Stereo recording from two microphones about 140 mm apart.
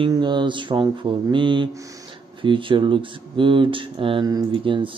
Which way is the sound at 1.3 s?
35° right (ahead or behind).